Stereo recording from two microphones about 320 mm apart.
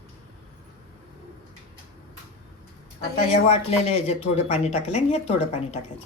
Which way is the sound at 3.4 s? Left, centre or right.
Centre.